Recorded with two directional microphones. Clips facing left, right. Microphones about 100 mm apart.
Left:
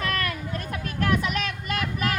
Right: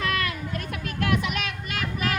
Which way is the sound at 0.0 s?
45° left (ahead or behind).